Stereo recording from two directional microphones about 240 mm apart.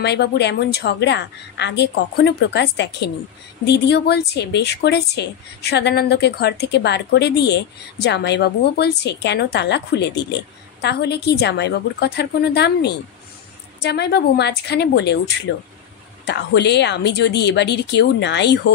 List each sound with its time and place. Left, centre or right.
0.0 s speech: left